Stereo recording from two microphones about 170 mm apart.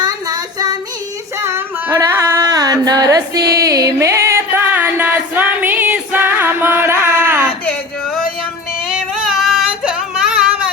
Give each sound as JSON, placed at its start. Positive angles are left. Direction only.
{"t": 0.0, "sound": "child singing", "side_deg": -20}
{"t": 1.4, "sound": "female singing", "side_deg": -15}
{"t": 3.7, "sound": "music", "side_deg": -20}
{"t": 7.6, "sound": "a sound", "side_deg": 5}
{"t": 8.9, "sound": "female singing", "side_deg": 0}